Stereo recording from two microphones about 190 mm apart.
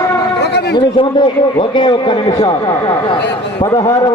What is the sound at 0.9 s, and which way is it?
A man's voice, 25° left (ahead or behind).